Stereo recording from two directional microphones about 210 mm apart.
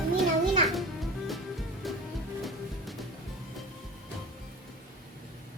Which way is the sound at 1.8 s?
Centre (ahead or behind).